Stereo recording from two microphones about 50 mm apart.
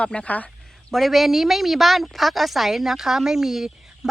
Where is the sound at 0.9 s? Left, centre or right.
Centre.